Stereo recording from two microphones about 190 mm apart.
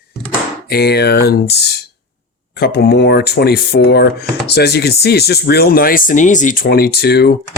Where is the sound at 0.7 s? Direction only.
55° left (ahead or behind).